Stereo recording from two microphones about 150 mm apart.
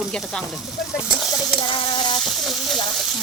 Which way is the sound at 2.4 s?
Centre (ahead or behind).